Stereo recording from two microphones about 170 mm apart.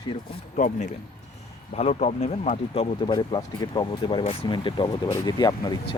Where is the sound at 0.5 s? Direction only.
45° left (ahead or behind); by 5.7 s 25° left (ahead or behind).